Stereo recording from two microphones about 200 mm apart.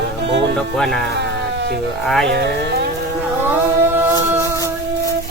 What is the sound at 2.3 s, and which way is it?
Speech, 55° right (ahead or behind).